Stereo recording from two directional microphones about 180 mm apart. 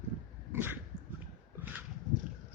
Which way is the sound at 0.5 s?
10° right (ahead or behind).